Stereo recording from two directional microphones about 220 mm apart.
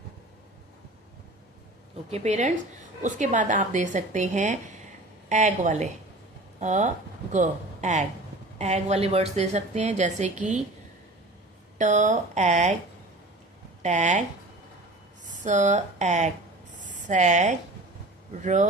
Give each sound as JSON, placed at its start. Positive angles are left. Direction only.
{"t": 2.0, "sound": "a woman's voice", "side_deg": -30}
{"t": 11.8, "sound": "a woman's voice", "side_deg": -35}
{"t": 13.8, "sound": "a woman's voice", "side_deg": -35}